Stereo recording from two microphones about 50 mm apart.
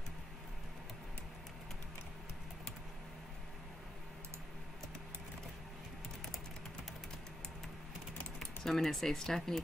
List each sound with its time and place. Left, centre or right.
8.4 s speech: centre